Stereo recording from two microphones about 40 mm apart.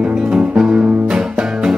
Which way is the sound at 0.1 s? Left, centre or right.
Centre.